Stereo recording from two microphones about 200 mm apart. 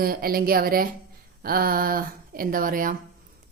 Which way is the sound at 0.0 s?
45° right (ahead or behind).